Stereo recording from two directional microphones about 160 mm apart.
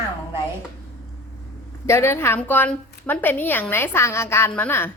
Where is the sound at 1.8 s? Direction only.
15° left (ahead or behind).